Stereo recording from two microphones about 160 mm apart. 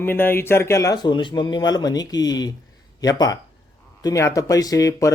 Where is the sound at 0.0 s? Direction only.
15° left (ahead or behind).